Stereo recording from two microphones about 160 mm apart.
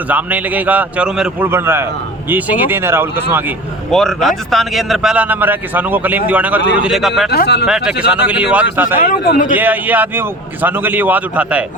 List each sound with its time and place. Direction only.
0.1 s a man's voice: 10° right (ahead or behind)
3.9 s a man's voice: centre (ahead or behind)
7.3 s speech: 85° left
7.7 s a man's voice: 5° right (ahead or behind)
9.0 s a man's voice: 75° left (ahead or behind)
9.6 s a man's voice: 10° right (ahead or behind)